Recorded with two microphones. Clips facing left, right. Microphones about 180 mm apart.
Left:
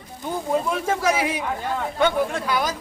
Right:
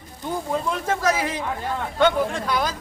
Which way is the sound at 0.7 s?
10° left (ahead or behind).